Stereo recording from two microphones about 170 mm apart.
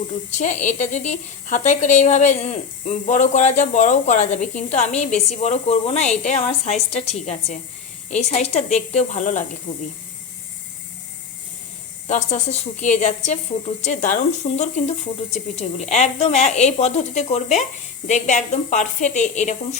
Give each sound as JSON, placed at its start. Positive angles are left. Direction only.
{"t": 0.3, "sound": "a woman's voice", "side_deg": 45}
{"t": 12.0, "sound": "a woman's voice", "side_deg": 40}